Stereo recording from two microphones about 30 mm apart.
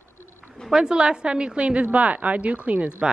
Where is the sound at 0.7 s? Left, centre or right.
Right.